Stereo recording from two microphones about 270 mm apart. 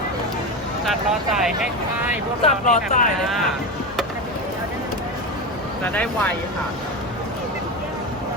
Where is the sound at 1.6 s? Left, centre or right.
Centre.